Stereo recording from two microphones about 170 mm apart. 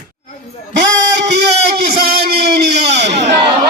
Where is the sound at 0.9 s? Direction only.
90° right.